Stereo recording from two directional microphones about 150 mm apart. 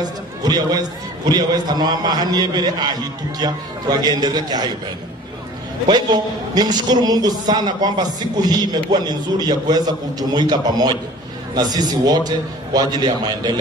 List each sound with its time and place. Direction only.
0.4 s a man's voice: 25° right (ahead or behind)
5.9 s a man's voice: 30° right (ahead or behind)